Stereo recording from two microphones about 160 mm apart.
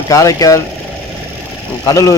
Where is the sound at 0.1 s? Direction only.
20° left (ahead or behind).